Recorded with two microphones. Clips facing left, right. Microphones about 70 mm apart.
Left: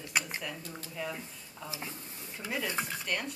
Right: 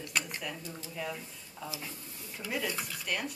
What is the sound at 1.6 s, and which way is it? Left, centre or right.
Speech, left.